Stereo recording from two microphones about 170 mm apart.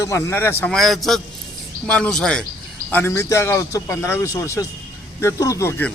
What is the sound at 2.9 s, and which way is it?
A man's voice, 15° left (ahead or behind).